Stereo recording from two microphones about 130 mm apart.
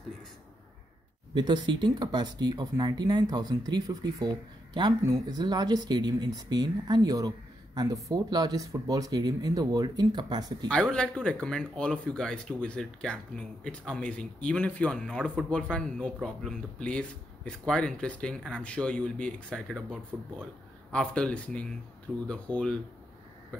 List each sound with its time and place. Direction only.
1.3 s speech: 35° right (ahead or behind)
10.7 s speech: 5° left (ahead or behind)